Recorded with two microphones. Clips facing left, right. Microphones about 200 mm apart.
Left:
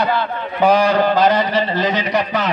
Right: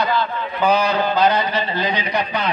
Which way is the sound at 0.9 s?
90° left.